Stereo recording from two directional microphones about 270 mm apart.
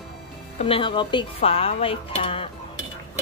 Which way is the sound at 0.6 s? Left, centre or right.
Centre.